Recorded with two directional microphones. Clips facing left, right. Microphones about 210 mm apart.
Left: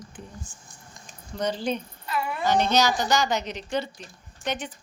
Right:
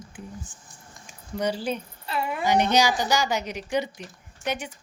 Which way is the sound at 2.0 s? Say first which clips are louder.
Right 1 dB; 30° right (ahead or behind).